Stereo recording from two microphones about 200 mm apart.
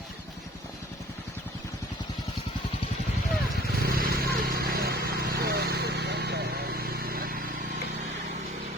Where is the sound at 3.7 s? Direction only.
50° right (ahead or behind).